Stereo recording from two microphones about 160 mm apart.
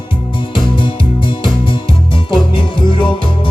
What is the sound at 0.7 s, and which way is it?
Music, 30° left (ahead or behind).